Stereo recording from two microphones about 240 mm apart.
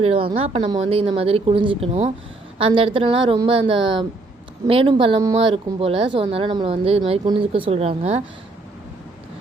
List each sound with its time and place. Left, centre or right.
0.0 s speech: right